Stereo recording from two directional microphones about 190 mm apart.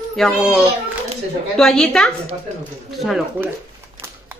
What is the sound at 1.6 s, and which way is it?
Speech, 5° left (ahead or behind).